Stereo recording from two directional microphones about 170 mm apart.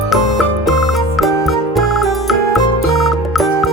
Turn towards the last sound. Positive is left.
turn(degrees=0)  # may be behind; listen again after turning